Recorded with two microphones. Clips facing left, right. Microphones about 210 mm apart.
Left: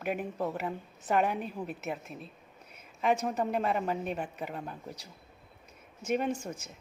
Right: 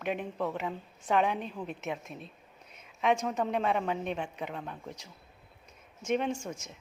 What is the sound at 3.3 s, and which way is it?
A woman's voice, 5° left (ahead or behind).